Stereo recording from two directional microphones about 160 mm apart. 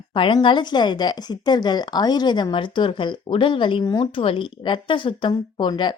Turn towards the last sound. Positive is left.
turn(degrees=30)  # may be behind; listen again after turning